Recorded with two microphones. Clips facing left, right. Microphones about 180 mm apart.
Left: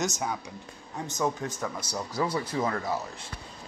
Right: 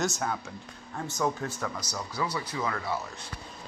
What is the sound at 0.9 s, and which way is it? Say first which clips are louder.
A man's voice: even; 15° left (ahead or behind).